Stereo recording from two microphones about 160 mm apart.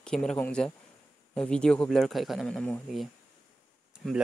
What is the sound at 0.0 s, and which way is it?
Speech, 5° left (ahead or behind).